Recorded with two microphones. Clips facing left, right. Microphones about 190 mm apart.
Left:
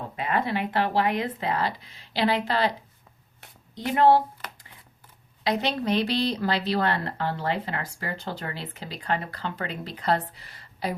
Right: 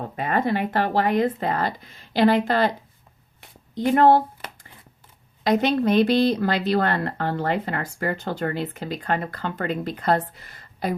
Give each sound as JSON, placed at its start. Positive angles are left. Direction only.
{"t": 0.2, "sound": "speech", "side_deg": -45}
{"t": 3.8, "sound": "speech", "side_deg": -50}
{"t": 5.4, "sound": "speech", "side_deg": -50}